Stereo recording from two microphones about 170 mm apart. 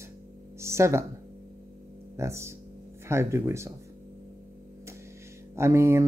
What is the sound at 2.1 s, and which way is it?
Speech, 15° right (ahead or behind).